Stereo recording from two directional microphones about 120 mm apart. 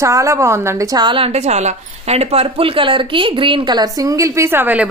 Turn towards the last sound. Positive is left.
turn(degrees=-15)  # may be behind; listen again after turning